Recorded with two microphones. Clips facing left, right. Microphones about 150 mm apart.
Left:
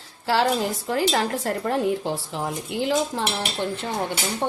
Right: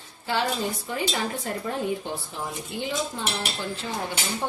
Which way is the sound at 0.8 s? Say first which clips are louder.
Left 6 dB; 90° left.